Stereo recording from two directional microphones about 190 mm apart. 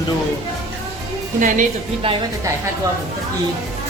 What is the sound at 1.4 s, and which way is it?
Speech, 45° right (ahead or behind).